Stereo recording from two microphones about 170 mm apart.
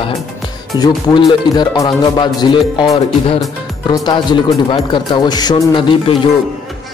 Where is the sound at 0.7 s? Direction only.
25° left (ahead or behind).